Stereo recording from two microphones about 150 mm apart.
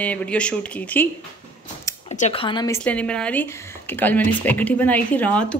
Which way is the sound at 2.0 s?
50° left (ahead or behind).